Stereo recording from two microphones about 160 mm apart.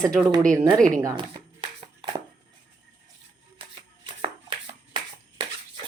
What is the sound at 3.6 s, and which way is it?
Shuffling cards, 30° right (ahead or behind).